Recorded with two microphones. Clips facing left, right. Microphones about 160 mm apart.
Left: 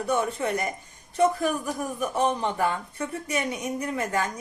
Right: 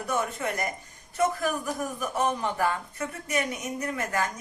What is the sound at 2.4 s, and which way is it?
A woman's voice, 25° left (ahead or behind).